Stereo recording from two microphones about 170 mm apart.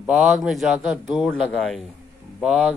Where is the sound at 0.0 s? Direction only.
5° right (ahead or behind).